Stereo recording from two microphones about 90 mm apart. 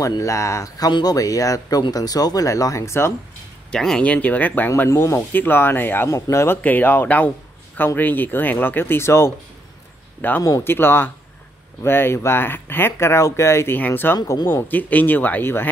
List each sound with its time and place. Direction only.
0.0 s speech: 35° left (ahead or behind)
3.7 s speech: 10° left (ahead or behind)
6.0 s speech: 35° left (ahead or behind)
13.7 s speech: 20° left (ahead or behind)
14.1 s speech: 40° left (ahead or behind)
14.5 s speech: 20° left (ahead or behind)